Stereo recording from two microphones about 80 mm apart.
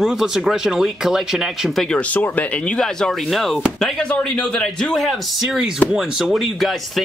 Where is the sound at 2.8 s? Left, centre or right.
Centre.